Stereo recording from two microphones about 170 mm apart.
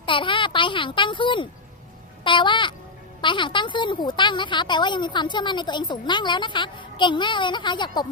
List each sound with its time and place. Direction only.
0.0 s a child's voice: 30° left (ahead or behind)